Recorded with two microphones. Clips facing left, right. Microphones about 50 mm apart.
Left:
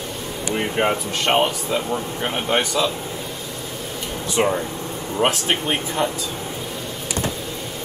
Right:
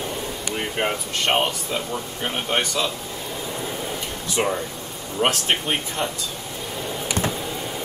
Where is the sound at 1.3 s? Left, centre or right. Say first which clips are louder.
Left 4 dB; centre.